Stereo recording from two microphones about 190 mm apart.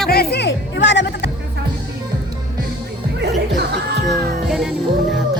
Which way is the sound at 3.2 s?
60° right (ahead or behind).